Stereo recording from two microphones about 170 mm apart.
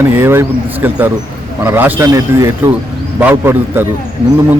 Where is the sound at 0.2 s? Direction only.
15° right (ahead or behind).